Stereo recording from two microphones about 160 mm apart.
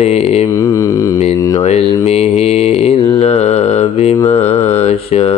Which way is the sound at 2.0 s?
40° left (ahead or behind).